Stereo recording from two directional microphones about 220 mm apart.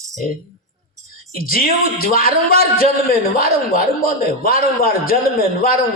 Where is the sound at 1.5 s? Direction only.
40° left (ahead or behind).